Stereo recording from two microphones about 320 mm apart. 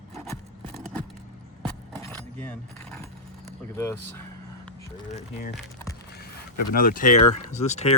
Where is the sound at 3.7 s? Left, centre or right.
Centre.